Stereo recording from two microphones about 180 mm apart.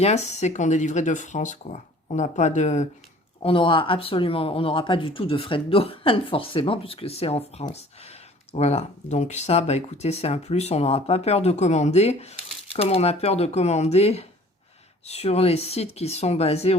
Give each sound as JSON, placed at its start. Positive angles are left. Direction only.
{"t": 0.0, "sound": "speech", "side_deg": 40}
{"t": 3.4, "sound": "speech", "side_deg": 30}